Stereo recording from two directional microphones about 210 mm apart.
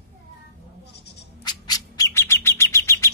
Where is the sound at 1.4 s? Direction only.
20° left (ahead or behind).